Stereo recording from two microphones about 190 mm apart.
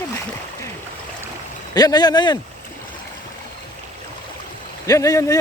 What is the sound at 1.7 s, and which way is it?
Speech, 20° left (ahead or behind).